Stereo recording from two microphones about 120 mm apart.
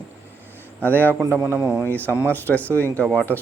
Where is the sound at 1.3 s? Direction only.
20° right (ahead or behind).